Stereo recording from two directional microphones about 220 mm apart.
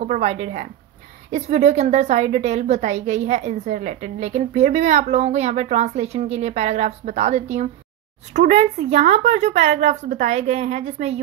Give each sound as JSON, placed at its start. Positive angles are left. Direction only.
{"t": 0.0, "sound": "a woman's voice", "side_deg": -30}